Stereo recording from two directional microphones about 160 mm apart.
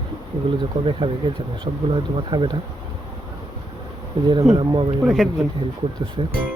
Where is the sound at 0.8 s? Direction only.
40° right (ahead or behind).